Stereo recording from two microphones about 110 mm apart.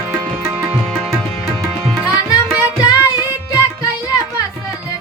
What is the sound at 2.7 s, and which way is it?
Music, 35° left (ahead or behind).